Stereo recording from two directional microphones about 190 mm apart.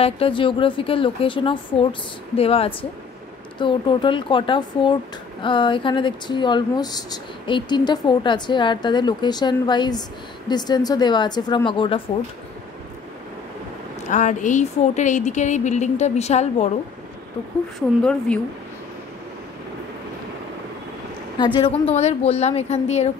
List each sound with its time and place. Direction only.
0.0 s speech: 30° left (ahead or behind)
14.1 s speech: 40° left (ahead or behind)
17.7 s a woman's voice: 5° left (ahead or behind)
21.5 s speech: 30° left (ahead or behind)